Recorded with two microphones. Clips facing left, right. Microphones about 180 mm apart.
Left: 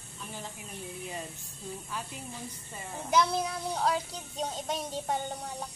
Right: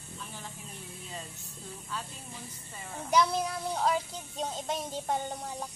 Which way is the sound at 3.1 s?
Centre (ahead or behind).